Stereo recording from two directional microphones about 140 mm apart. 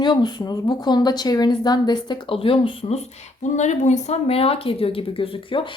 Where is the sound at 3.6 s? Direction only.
55° left (ahead or behind).